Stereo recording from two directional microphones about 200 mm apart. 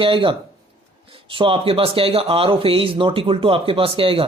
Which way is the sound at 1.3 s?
25° right (ahead or behind).